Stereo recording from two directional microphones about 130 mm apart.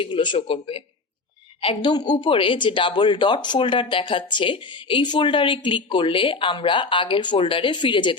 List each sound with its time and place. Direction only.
0.0 s speech: 40° left (ahead or behind)